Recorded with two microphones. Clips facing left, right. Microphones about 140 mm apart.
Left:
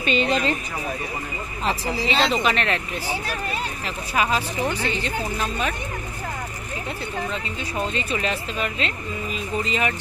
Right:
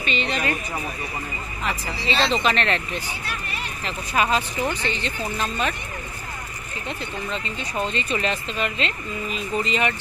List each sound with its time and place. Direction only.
0.0 s speech: 45° left (ahead or behind)
1.9 s speech: 15° left (ahead or behind)
7.2 s speech: 5° left (ahead or behind)